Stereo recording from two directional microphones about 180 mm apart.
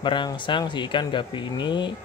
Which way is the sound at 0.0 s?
25° left (ahead or behind).